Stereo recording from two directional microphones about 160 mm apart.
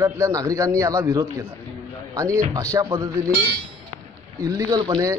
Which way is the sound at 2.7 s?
20° right (ahead or behind).